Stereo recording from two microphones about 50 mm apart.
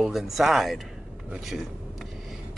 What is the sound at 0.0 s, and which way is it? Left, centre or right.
Speech, centre.